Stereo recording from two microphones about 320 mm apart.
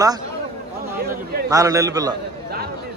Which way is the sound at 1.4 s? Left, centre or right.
Centre.